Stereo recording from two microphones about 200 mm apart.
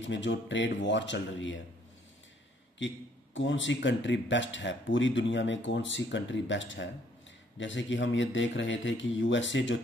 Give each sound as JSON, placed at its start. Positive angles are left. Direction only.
{"t": 0.0, "sound": "speech", "side_deg": 65}
{"t": 3.3, "sound": "speech", "side_deg": 70}